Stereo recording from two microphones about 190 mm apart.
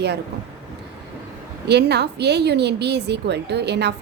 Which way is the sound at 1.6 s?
60° right (ahead or behind).